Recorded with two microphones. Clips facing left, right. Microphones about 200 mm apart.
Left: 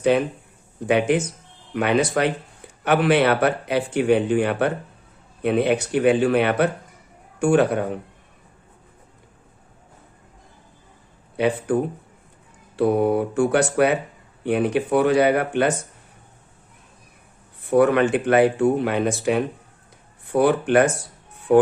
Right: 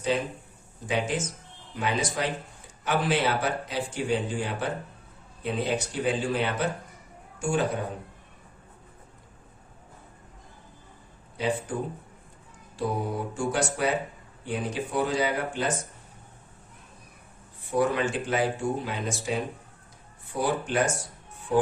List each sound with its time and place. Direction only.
0.1 s speech: 65° left (ahead or behind)
11.3 s speech: 65° left (ahead or behind)
17.7 s speech: 65° left (ahead or behind)